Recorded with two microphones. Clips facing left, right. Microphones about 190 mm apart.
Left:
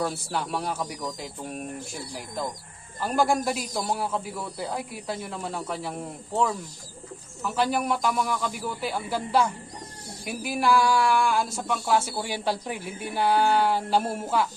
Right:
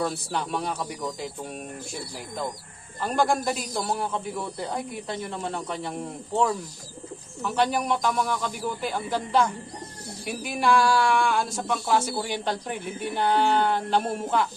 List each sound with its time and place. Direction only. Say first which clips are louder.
0.0 s speech: right 1 dB; centre (ahead or behind)
3.0 s speech: even; 5° left (ahead or behind)
7.4 s speech: right 1 dB; centre (ahead or behind)